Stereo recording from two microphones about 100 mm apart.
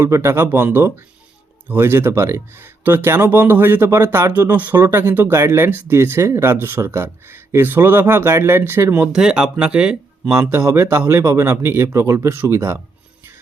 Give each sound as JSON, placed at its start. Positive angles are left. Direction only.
{"t": 0.0, "sound": "speech", "side_deg": -25}
{"t": 9.1, "sound": "speech", "side_deg": -10}
{"t": 10.4, "sound": "speech", "side_deg": -25}